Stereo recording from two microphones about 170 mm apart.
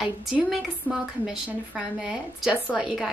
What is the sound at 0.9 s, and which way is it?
Speech, 10° left (ahead or behind).